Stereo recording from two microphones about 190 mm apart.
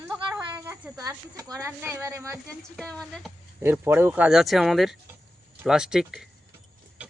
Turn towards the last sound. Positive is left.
turn(degrees=-5)  # may be behind; listen again after turning